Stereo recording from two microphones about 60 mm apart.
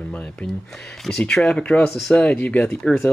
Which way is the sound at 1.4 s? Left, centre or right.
Centre.